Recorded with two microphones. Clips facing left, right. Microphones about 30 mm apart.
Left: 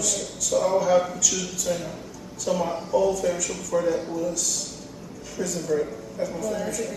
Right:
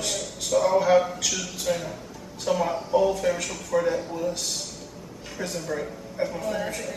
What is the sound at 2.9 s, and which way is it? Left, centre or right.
Speech, right.